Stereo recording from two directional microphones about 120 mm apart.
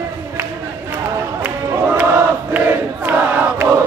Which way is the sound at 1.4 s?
20° right (ahead or behind).